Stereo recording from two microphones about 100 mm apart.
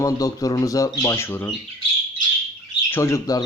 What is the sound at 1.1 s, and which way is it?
Speech, 25° left (ahead or behind).